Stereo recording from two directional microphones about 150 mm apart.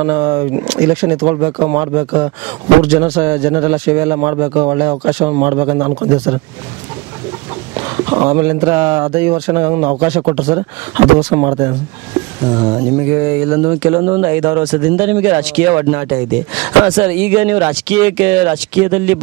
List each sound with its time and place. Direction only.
0.0 s speech: 15° right (ahead or behind)
7.7 s speech: 15° right (ahead or behind)
12.5 s speech: 15° right (ahead or behind)